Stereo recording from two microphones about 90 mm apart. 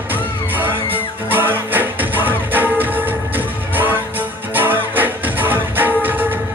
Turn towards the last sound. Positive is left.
turn(degrees=-20)  # may be behind; listen again after turning